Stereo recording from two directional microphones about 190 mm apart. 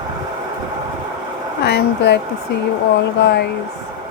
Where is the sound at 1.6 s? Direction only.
60° left (ahead or behind).